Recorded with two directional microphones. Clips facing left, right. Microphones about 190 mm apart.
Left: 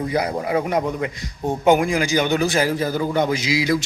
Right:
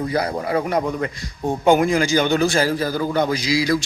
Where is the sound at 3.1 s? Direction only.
20° left (ahead or behind).